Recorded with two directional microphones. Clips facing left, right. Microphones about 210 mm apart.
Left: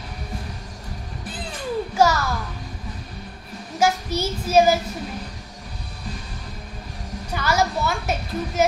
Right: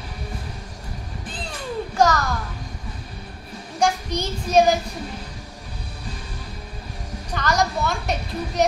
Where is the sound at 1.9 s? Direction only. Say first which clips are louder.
Even; 10° left (ahead or behind).